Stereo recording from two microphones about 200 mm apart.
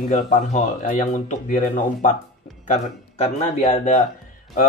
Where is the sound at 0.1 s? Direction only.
40° left (ahead or behind).